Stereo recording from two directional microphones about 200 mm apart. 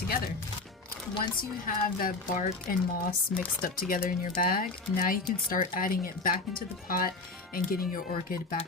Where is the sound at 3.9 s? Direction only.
40° left (ahead or behind).